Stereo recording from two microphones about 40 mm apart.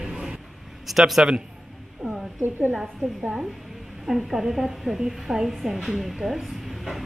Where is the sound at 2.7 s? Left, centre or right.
Centre.